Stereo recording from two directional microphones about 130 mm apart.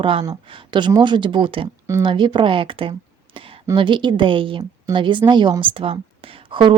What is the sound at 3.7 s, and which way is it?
A woman's voice, 35° right (ahead or behind).